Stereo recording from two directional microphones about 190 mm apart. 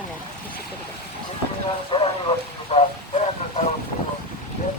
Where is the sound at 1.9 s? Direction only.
25° left (ahead or behind).